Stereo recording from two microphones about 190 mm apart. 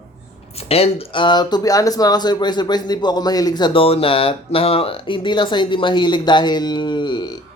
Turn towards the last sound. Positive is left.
turn(degrees=25)  # may be behind; listen again after turning